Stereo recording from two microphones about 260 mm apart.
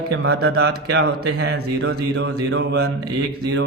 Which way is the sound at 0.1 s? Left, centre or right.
Right.